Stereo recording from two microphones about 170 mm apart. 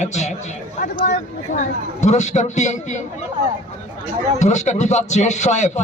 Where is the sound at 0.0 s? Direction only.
45° left (ahead or behind).